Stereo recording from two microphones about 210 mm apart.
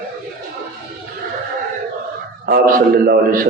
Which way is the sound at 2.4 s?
45° right (ahead or behind).